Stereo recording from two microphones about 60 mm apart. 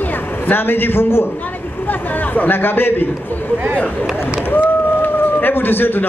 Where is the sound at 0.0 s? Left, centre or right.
Left.